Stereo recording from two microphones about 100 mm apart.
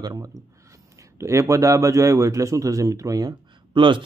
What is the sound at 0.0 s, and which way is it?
Speech, 40° right (ahead or behind).